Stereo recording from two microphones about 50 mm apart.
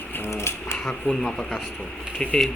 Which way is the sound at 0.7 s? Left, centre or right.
Centre.